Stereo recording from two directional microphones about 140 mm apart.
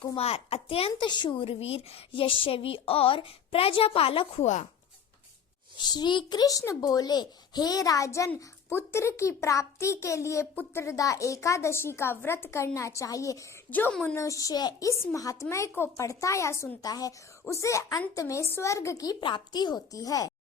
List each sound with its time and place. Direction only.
0.2 s a child's voice: 45° left (ahead or behind)
5.7 s a child's voice: 30° left (ahead or behind)
13.7 s a child's voice: 10° left (ahead or behind)